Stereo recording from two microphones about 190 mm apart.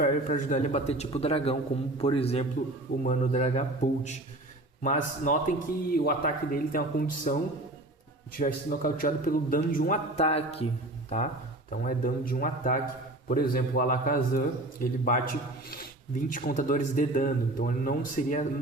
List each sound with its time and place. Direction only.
0.0 s a man's voice: 45° left (ahead or behind)
8.4 s a man's voice: 45° left (ahead or behind)
10.2 s a man's voice: 30° left (ahead or behind)